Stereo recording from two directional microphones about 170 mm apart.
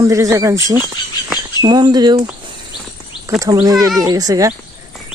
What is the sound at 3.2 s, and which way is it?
Speech, 20° right (ahead or behind).